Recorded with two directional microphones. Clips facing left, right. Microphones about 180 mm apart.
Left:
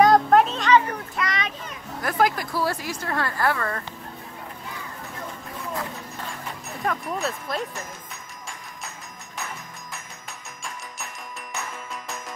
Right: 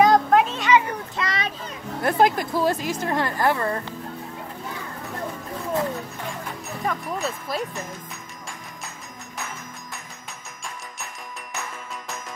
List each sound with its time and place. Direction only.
0.0 s music: centre (ahead or behind)
1.1 s a child's voice: 30° right (ahead or behind)
6.8 s speech: centre (ahead or behind)